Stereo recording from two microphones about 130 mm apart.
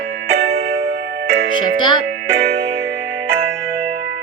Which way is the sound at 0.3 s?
55° right (ahead or behind).